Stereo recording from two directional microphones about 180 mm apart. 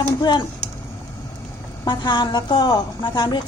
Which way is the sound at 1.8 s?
25° left (ahead or behind).